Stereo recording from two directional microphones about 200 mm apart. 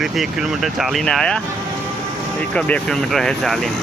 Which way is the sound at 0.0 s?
Centre (ahead or behind).